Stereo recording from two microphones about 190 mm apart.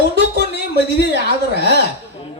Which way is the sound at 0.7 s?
60° left (ahead or behind).